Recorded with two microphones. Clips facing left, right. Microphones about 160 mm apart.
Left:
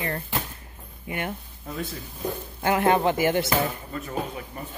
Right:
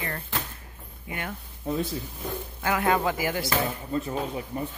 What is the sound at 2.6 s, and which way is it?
Speech, 25° left (ahead or behind).